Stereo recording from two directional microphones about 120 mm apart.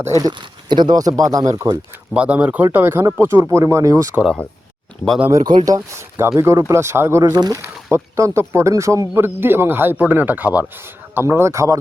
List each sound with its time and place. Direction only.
0.0 s speech: 30° right (ahead or behind)
2.1 s speech: 10° right (ahead or behind); by 4.1 s 25° right (ahead or behind)
4.1 s speech: 5° right (ahead or behind)
5.3 s speech: 35° right (ahead or behind)
7.2 s speech: 35° right (ahead or behind)
7.6 s speech: 20° right (ahead or behind)